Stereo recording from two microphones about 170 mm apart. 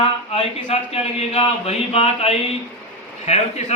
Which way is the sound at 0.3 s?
35° left (ahead or behind).